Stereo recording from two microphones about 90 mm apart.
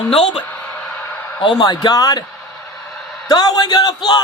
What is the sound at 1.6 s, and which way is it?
Speech, 50° left (ahead or behind).